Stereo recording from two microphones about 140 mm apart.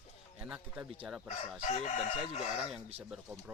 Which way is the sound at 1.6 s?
55° left (ahead or behind).